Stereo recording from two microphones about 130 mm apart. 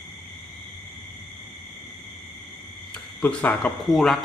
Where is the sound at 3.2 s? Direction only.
10° left (ahead or behind).